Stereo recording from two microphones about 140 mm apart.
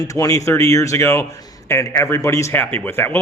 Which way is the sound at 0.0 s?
25° left (ahead or behind).